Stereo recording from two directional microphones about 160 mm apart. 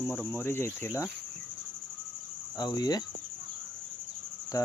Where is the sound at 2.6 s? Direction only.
25° left (ahead or behind).